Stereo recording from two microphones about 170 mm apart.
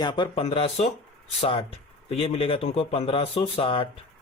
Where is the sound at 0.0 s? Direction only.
30° left (ahead or behind).